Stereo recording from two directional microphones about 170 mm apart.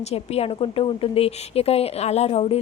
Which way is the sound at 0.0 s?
40° left (ahead or behind).